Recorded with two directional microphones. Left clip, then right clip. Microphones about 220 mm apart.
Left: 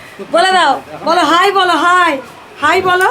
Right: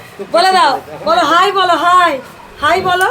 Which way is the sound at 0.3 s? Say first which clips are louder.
Even; 5° left (ahead or behind).